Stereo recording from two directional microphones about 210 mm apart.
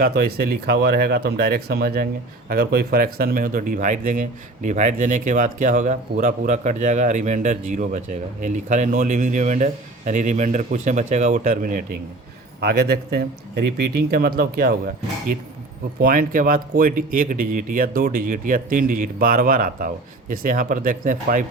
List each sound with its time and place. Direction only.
0.0 s speech: 45° right (ahead or behind)
16.0 s speech: 40° right (ahead or behind)